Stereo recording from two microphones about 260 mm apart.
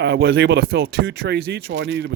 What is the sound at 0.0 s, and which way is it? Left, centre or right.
Speech, right.